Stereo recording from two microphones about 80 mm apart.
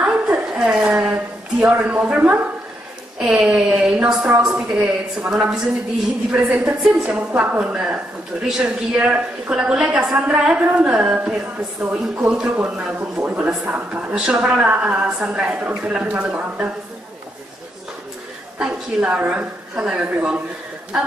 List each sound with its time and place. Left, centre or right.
0.0 s a sound: centre
1.8 s speech: centre
3.2 s a woman's voice: centre
6.3 s a woman's voice: centre
18.6 s a woman's voice: centre